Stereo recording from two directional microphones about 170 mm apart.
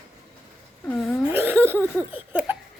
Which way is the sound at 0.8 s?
10° left (ahead or behind).